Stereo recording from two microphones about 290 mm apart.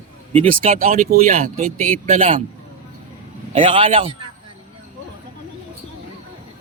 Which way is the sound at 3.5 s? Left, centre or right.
Centre.